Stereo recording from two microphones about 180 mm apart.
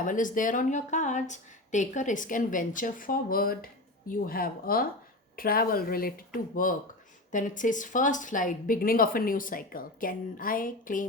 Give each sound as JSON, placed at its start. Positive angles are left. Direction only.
{"t": 0.0, "sound": "a woman's voice", "side_deg": 45}